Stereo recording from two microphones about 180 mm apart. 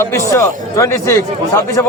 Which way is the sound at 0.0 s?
15° left (ahead or behind).